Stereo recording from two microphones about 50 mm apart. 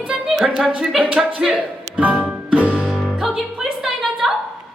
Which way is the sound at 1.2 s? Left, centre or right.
Centre.